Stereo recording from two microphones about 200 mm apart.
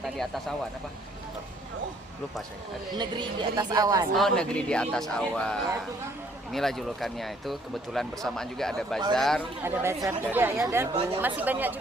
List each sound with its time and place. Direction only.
0.0 s speech: centre (ahead or behind)
2.9 s speech: 20° right (ahead or behind)
4.1 s speech: 5° left (ahead or behind)
9.6 s speech: 10° right (ahead or behind)